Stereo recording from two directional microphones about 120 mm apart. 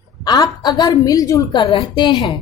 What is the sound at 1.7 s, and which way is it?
Speech, 40° left (ahead or behind).